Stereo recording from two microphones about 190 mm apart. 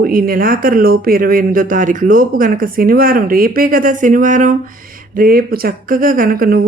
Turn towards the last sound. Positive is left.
turn(degrees=-50)  # may be behind; listen again after turning